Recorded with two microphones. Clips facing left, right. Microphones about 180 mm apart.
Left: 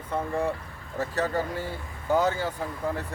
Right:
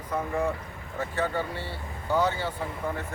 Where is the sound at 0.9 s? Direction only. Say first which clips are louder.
Left 2 dB; 40° left (ahead or behind).